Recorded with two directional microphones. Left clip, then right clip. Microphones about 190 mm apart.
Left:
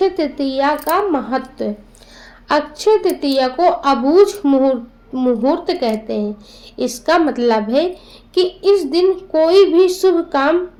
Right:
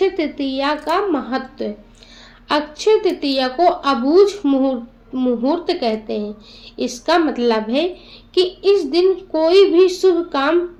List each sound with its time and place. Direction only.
0.0 s a woman's voice: 30° left (ahead or behind)